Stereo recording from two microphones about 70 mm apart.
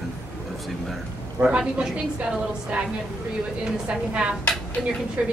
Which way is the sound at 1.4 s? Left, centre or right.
Centre.